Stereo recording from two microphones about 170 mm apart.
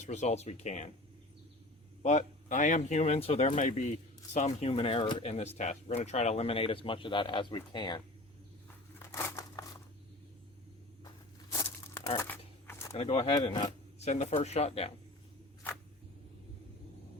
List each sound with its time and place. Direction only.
0.0 s speech: 40° left (ahead or behind)
2.0 s speech: 45° left (ahead or behind); by 8.0 s 25° left (ahead or behind)
9.0 s crumpling: 15° left (ahead or behind)
11.0 s a sound: 15° left (ahead or behind)
12.1 s shuffling cards: 15° left (ahead or behind)
12.9 s speech: 35° left (ahead or behind)
14.0 s speech: 40° left (ahead or behind)